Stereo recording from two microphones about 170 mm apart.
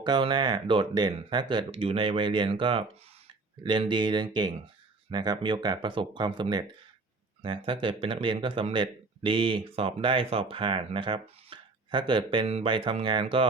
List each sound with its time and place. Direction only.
0.0 s a man's voice: 25° right (ahead or behind)